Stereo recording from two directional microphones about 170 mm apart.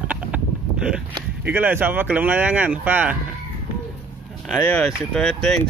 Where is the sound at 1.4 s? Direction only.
10° right (ahead or behind).